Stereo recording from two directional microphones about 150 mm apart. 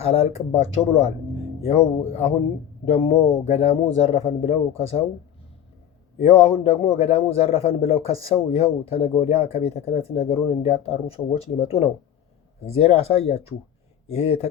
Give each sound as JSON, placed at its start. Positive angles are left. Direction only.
{"t": 0.0, "sound": "a man's voice", "side_deg": 45}
{"t": 6.1, "sound": "a man's voice", "side_deg": 45}
{"t": 12.6, "sound": "speech", "side_deg": 40}